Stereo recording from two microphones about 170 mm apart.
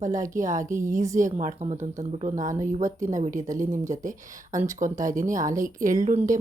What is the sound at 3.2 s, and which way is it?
Speech, 45° right (ahead or behind).